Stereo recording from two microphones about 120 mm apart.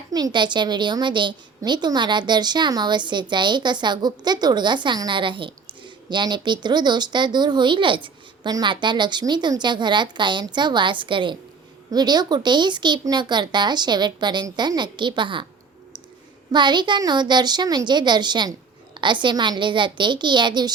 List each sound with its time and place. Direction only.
0.1 s a woman's voice: 35° right (ahead or behind)
16.5 s a woman's voice: 40° right (ahead or behind)